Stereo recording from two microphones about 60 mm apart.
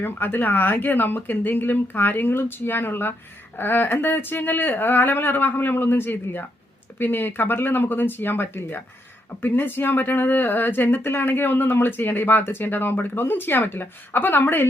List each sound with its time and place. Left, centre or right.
0.0 s speech: left